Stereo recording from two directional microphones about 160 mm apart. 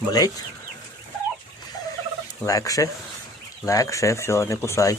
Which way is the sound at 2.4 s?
20° left (ahead or behind).